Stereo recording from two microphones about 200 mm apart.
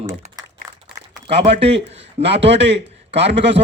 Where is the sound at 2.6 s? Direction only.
60° right (ahead or behind).